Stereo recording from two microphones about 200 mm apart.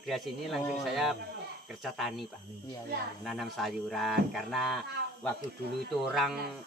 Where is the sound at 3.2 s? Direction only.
Centre (ahead or behind).